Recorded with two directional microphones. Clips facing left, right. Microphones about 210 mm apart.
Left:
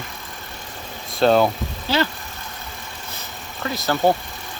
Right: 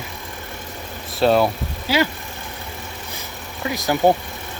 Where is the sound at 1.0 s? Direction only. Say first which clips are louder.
Even; 5° right (ahead or behind).